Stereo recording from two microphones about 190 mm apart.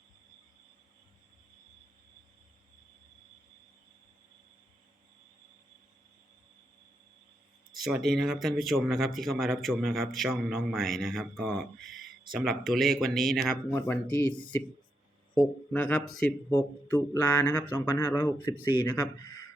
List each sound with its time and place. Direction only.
7.7 s speech: centre (ahead or behind)